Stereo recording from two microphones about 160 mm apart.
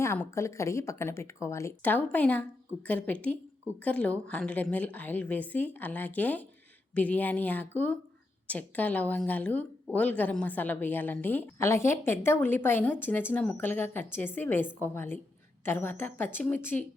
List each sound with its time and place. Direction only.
0.0 s a woman's voice: 15° left (ahead or behind)